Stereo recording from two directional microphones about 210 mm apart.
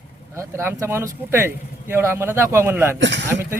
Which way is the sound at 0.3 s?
10° right (ahead or behind).